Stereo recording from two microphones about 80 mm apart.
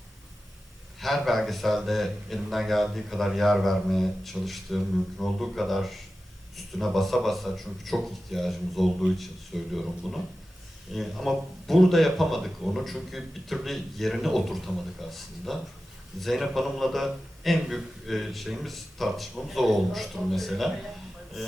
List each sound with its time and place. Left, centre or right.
0.9 s a man's voice: centre